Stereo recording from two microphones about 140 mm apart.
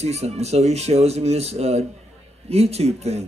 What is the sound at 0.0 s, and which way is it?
A man's voice, 50° right (ahead or behind).